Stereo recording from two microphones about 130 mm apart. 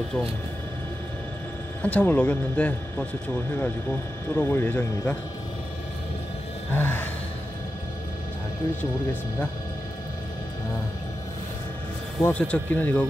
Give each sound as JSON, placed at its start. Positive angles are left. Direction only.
{"t": 1.8, "sound": "speech", "side_deg": 10}
{"t": 6.7, "sound": "speech", "side_deg": 15}
{"t": 12.2, "sound": "speech", "side_deg": 10}